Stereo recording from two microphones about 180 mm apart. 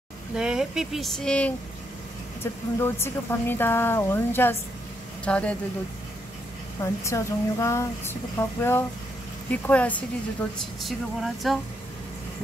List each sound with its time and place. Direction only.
0.4 s speech: 5° right (ahead or behind)
6.8 s speech: 15° left (ahead or behind); by 11.5 s centre (ahead or behind)